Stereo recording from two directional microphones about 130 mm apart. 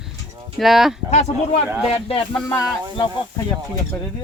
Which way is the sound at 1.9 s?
50° left (ahead or behind).